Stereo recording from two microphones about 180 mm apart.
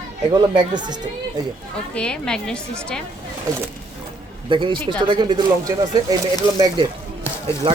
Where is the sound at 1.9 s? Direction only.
5° left (ahead or behind).